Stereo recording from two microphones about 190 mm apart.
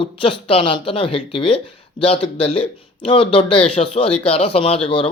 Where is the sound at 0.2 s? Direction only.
30° left (ahead or behind).